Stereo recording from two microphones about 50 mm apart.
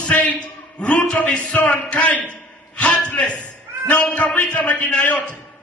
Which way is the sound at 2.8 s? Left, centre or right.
Left.